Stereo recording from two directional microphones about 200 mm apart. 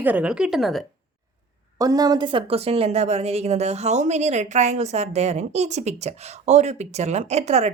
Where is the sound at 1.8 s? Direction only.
20° right (ahead or behind).